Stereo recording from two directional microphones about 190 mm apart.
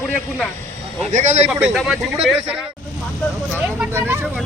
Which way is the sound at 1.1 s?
35° right (ahead or behind).